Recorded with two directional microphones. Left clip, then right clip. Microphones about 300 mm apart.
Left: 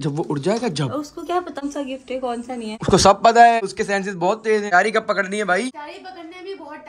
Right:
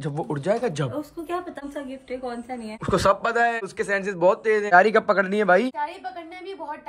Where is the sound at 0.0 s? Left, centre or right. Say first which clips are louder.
Left 5 dB; centre.